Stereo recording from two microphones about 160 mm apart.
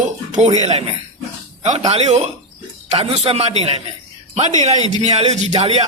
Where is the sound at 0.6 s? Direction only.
40° right (ahead or behind).